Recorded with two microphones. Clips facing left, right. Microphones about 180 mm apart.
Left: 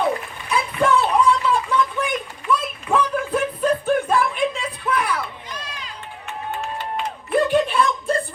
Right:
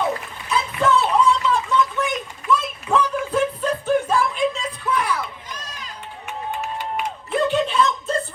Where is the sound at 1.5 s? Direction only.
10° left (ahead or behind).